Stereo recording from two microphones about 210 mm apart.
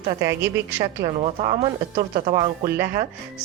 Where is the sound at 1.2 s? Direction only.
30° right (ahead or behind).